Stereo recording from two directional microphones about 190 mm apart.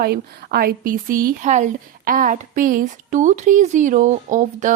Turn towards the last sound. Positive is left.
turn(degrees=-40)  # may be behind; listen again after turning